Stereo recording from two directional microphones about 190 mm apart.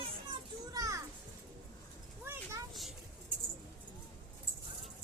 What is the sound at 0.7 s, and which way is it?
Children playing, 20° right (ahead or behind).